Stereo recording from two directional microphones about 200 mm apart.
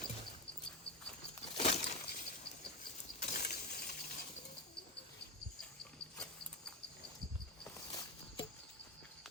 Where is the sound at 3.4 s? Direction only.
55° left (ahead or behind).